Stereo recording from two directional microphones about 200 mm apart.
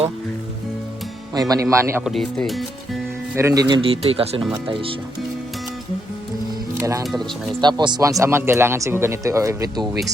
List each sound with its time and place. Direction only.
1.3 s speech: 20° right (ahead or behind)
2.0 s speech: centre (ahead or behind)
3.3 s speech: 15° right (ahead or behind)
6.7 s speech: 15° right (ahead or behind)
7.0 s speech: centre (ahead or behind)
7.6 s speech: 20° right (ahead or behind)